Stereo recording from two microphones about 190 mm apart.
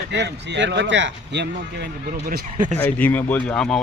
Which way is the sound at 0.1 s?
65° right (ahead or behind).